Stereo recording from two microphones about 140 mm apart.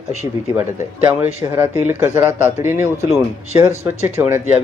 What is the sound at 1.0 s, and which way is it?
A man's voice, 15° right (ahead or behind).